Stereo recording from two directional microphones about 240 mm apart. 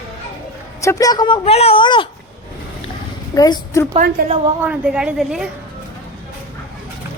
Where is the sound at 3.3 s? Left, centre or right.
Centre.